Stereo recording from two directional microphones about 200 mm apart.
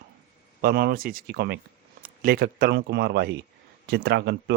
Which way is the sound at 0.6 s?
50° right (ahead or behind).